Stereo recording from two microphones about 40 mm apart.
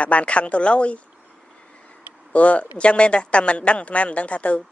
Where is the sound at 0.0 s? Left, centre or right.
Left.